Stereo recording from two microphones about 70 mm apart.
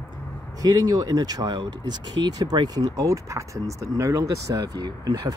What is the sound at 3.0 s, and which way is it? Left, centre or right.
Speech, right.